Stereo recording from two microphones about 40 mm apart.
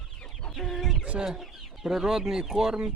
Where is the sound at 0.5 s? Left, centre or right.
Centre.